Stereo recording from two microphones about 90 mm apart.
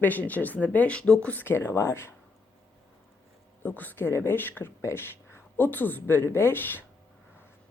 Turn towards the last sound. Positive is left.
turn(degrees=20)  # may be behind; listen again after turning